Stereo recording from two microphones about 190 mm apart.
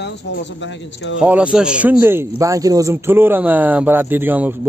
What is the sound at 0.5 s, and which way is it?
Speech, 75° left (ahead or behind).